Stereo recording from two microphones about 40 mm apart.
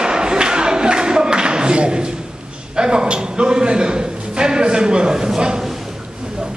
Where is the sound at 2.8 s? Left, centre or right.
Right.